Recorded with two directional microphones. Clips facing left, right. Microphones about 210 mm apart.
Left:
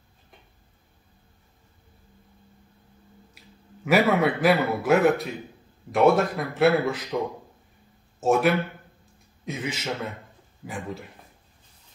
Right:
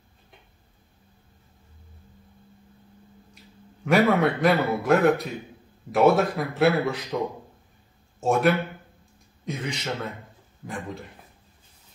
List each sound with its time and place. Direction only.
3.8 s a man's voice: 5° left (ahead or behind)
8.2 s speech: centre (ahead or behind)